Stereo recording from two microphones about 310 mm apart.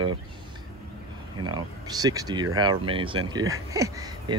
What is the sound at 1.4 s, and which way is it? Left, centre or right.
Speech, right.